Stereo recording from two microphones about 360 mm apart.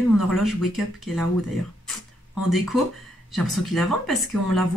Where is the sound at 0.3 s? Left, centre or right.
Centre.